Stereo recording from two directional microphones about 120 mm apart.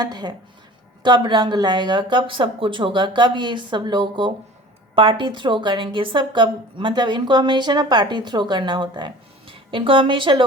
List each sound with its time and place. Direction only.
0.0 s a woman's voice: 35° right (ahead or behind)